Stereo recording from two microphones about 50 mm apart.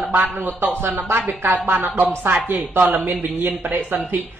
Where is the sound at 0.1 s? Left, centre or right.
Right.